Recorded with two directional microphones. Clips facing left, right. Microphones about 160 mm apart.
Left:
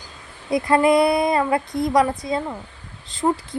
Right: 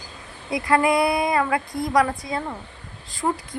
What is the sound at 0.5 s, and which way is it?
Speech, 25° left (ahead or behind).